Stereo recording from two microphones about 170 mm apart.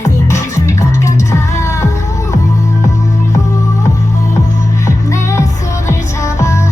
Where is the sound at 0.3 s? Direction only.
15° left (ahead or behind).